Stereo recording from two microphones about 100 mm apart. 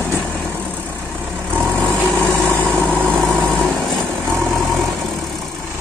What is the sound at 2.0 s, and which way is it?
Vehicle, 5° left (ahead or behind).